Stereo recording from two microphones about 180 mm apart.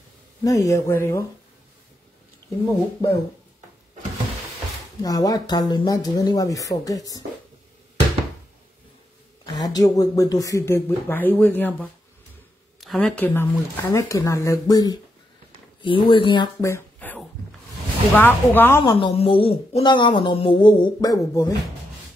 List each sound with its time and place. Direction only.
0.4 s speech: 20° left (ahead or behind)
2.6 s speech: 15° left (ahead or behind)
5.0 s speech: 20° left (ahead or behind)
9.5 s speech: 20° left (ahead or behind)
16.6 s a sound: 10° left (ahead or behind)
18.1 s speech: 10° left (ahead or behind)
18.8 s speech: 25° left (ahead or behind)